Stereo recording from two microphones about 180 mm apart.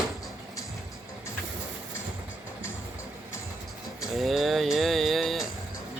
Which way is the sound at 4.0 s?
Centre (ahead or behind).